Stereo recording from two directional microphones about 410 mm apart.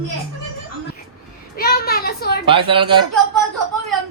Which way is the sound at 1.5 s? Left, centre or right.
Left.